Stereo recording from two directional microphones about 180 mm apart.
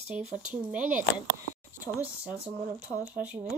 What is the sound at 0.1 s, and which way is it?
Speech, 5° right (ahead or behind).